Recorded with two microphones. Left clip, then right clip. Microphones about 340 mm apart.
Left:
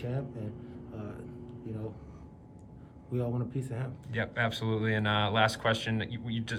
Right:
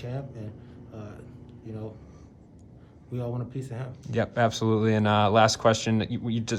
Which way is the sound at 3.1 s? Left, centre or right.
Centre.